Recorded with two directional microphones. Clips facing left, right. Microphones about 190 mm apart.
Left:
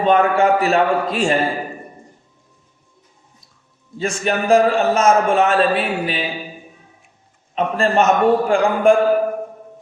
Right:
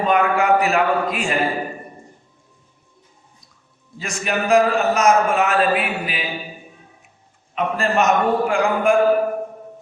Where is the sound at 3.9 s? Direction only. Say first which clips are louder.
Left 4 dB; 30° left (ahead or behind).